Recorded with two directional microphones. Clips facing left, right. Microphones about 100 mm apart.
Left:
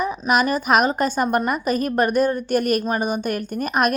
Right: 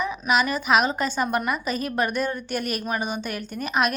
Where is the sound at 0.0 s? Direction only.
45° left (ahead or behind).